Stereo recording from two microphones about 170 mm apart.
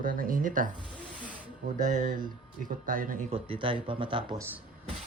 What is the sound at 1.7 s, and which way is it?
Speech, 50° right (ahead or behind).